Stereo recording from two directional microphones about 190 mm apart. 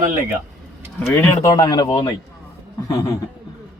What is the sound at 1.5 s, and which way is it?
A man's voice, 20° left (ahead or behind).